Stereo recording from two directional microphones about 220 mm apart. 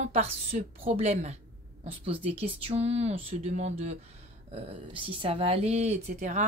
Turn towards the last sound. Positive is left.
turn(degrees=-30)  # may be behind; listen again after turning